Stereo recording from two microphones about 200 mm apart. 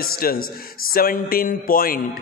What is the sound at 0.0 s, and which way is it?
A man's voice, 45° left (ahead or behind).